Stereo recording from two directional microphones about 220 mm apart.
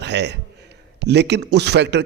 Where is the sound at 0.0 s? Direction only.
50° right (ahead or behind).